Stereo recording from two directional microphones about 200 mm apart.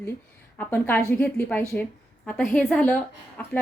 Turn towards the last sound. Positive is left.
turn(degrees=10)  # may be behind; listen again after turning